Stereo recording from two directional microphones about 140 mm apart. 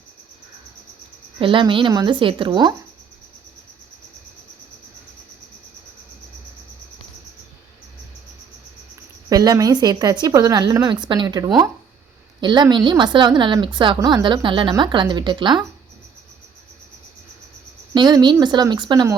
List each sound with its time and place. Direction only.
1.4 s a woman's voice: 35° right (ahead or behind)
9.3 s a woman's voice: 25° right (ahead or behind)
17.9 s a woman's voice: 30° right (ahead or behind)